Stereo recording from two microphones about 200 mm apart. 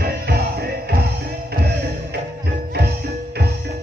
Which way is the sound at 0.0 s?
50° right (ahead or behind).